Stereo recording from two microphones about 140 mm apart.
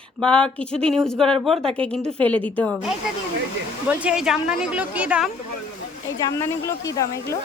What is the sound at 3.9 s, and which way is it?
A woman's voice, 10° right (ahead or behind).